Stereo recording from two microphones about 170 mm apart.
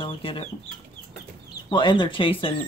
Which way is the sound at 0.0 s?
30° left (ahead or behind).